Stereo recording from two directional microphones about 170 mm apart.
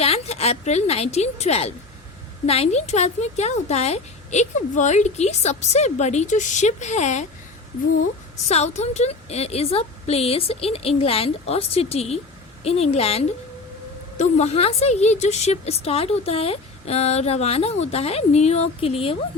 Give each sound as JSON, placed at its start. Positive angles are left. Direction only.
{"t": 0.0, "sound": "a woman's voice", "side_deg": 35}
{"t": 8.4, "sound": "a woman's voice", "side_deg": 40}